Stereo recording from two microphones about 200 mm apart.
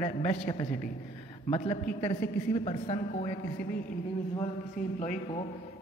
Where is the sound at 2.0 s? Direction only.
30° left (ahead or behind).